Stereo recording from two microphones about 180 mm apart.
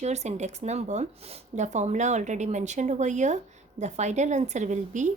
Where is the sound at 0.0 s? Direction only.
40° right (ahead or behind).